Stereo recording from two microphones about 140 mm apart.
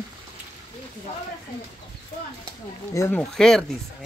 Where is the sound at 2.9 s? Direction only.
20° left (ahead or behind).